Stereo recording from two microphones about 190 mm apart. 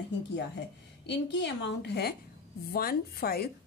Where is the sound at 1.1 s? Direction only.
65° left (ahead or behind).